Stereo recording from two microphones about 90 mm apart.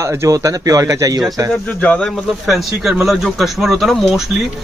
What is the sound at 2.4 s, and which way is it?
Speech, centre (ahead or behind).